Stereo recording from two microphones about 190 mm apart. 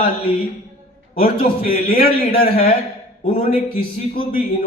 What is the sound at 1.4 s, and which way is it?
Speech, 50° left (ahead or behind).